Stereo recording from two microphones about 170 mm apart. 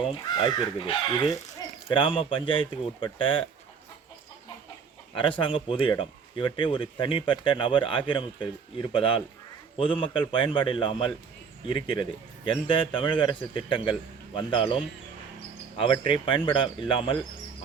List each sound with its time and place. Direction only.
0.1 s a man's voice: 30° left (ahead or behind)
5.1 s a man's voice: 30° left (ahead or behind)
12.5 s a man's voice: 30° left (ahead or behind)
15.8 s speech: 30° left (ahead or behind)